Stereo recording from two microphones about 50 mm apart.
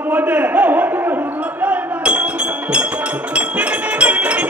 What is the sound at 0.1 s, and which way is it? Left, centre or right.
Speech, right.